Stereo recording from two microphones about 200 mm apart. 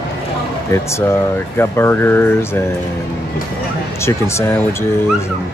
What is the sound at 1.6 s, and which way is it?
Speech, 10° left (ahead or behind).